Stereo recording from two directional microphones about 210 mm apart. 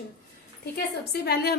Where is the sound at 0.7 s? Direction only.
50° left (ahead or behind).